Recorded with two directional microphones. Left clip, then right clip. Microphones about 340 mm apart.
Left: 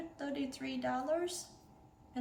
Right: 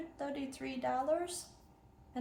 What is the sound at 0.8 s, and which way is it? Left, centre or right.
Speech, centre.